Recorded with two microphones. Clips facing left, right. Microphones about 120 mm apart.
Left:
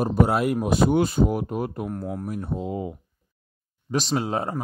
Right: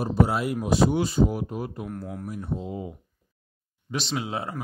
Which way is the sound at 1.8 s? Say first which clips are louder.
Left 4 dB; 40° left (ahead or behind).